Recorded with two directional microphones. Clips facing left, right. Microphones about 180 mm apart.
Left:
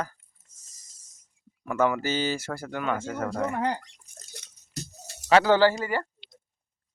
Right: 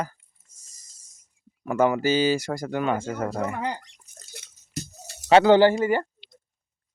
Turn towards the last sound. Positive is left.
turn(degrees=-20)  # may be behind; listen again after turning